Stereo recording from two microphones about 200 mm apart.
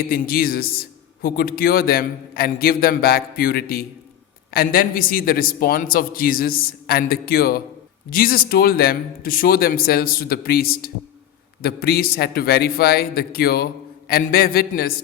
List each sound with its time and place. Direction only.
0.1 s a man's voice: 45° left (ahead or behind)